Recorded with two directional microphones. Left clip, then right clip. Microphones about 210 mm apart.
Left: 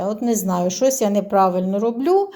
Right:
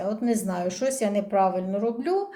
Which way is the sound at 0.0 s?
30° left (ahead or behind).